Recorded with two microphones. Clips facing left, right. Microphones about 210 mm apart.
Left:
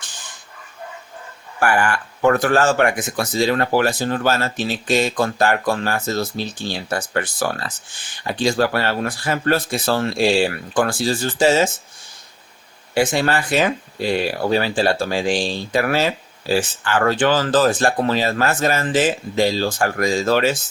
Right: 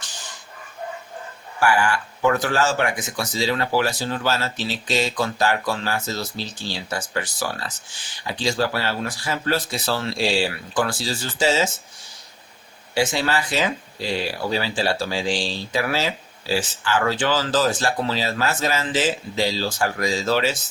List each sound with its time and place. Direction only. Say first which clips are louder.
1.5 s speech: left 1 dB; 55° left (ahead or behind)
12.9 s speech: left 4 dB; 55° left (ahead or behind)